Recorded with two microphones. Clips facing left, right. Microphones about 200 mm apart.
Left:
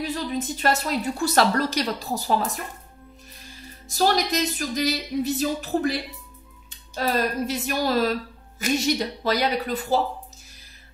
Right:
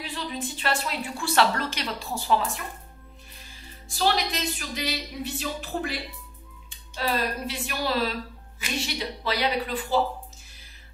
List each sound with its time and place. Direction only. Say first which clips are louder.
0.0 s a woman's voice: left 6 dB; 40° left (ahead or behind)
3.9 s a woman's voice: left 4 dB; 40° left (ahead or behind)
7.0 s a woman's voice: left 4 dB; 45° left (ahead or behind)